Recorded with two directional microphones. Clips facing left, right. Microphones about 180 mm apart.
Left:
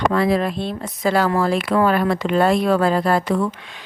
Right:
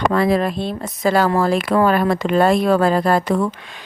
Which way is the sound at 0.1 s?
45° right (ahead or behind).